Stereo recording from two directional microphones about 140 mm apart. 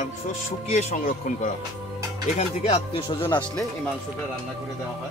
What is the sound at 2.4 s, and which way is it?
Music, 45° left (ahead or behind).